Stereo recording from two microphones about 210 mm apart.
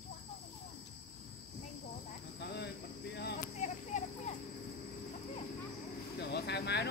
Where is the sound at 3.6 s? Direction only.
35° left (ahead or behind).